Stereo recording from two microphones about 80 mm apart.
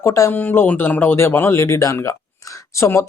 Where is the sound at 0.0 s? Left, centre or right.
Left.